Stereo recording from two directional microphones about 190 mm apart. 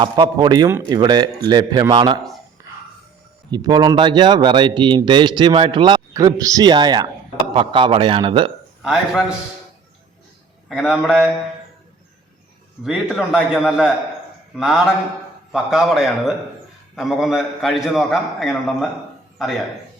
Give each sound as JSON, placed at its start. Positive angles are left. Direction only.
{"t": 0.0, "sound": "speech", "side_deg": -25}
{"t": 2.6, "sound": "music", "side_deg": -15}
{"t": 3.5, "sound": "speech", "side_deg": -20}
{"t": 8.8, "sound": "a man's voice", "side_deg": -5}
{"t": 10.7, "sound": "a man's voice", "side_deg": -5}
{"t": 12.8, "sound": "a man's voice", "side_deg": -5}